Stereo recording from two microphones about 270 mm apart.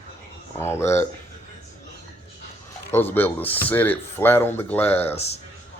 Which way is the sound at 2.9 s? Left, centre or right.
Centre.